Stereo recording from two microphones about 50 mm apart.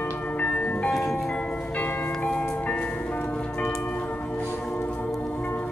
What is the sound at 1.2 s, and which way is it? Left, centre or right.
Church bell, left.